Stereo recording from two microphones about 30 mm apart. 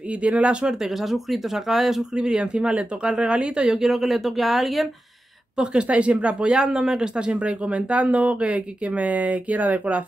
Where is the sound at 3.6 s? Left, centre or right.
Centre.